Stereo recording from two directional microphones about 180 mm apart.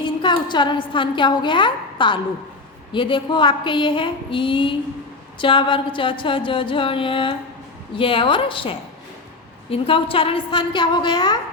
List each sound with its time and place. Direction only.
0.0 s a woman's voice: 25° left (ahead or behind)
2.9 s music: 25° left (ahead or behind)